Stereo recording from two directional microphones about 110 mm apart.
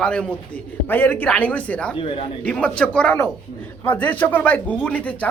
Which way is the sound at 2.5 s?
10° left (ahead or behind).